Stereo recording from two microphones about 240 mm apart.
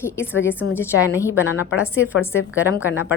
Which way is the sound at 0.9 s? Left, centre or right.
Left.